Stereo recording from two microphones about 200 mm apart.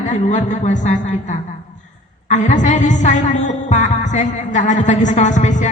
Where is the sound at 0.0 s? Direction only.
40° left (ahead or behind).